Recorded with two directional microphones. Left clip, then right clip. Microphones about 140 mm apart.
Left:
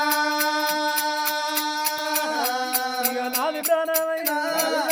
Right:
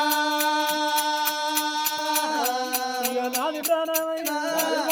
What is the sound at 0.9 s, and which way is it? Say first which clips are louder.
Music: even; 15° left (ahead or behind).